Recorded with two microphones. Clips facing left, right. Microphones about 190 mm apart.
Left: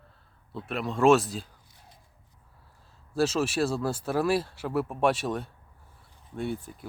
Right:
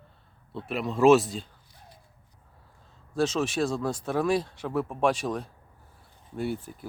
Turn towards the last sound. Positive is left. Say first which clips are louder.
# right 1 dB
turn(degrees=0)  # may be behind; listen again after turning